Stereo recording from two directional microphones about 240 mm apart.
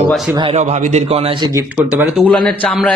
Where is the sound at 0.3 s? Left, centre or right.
Right.